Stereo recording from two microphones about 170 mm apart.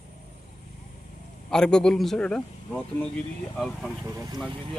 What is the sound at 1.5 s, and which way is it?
Speech, 5° left (ahead or behind).